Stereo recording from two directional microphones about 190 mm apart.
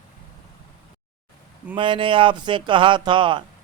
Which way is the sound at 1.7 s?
25° right (ahead or behind).